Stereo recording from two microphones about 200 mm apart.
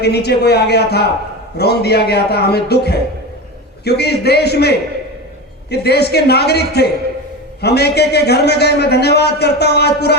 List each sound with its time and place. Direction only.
0.0 s a man's voice: 55° left (ahead or behind)